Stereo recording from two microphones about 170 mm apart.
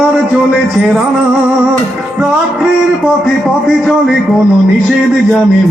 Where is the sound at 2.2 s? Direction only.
10° right (ahead or behind).